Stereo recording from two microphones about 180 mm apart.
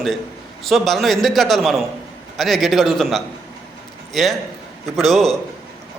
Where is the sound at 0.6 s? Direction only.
Centre (ahead or behind).